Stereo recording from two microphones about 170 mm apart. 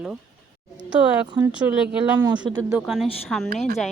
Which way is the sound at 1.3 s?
25° right (ahead or behind).